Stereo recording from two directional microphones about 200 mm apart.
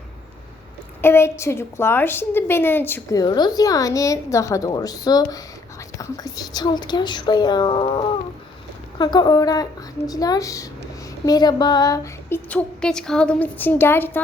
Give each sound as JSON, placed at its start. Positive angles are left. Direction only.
{"t": 1.0, "sound": "a woman's voice", "side_deg": 10}
{"t": 12.5, "sound": "a woman's voice", "side_deg": 5}